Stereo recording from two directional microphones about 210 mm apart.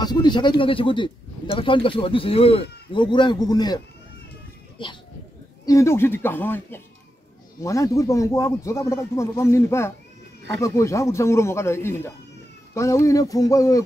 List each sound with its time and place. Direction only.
0.0 s speech: 20° left (ahead or behind)